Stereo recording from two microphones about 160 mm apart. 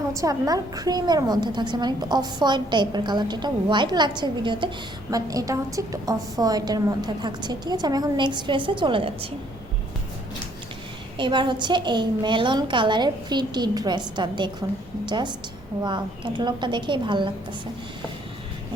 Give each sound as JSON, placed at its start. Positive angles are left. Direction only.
{"t": 0.1, "sound": "a woman's voice", "side_deg": -20}
{"t": 11.2, "sound": "a woman's voice", "side_deg": -30}